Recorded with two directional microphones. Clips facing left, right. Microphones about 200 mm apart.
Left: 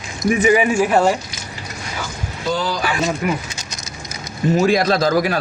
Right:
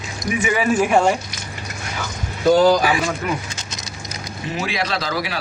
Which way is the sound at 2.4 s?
45° right (ahead or behind).